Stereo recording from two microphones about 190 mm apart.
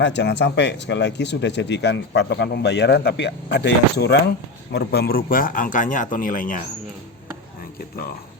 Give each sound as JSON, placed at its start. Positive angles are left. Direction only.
{"t": 0.0, "sound": "a man's voice", "side_deg": 65}